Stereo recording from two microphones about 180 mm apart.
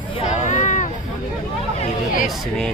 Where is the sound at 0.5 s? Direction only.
40° left (ahead or behind).